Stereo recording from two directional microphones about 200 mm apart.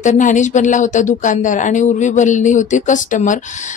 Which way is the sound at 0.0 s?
40° left (ahead or behind).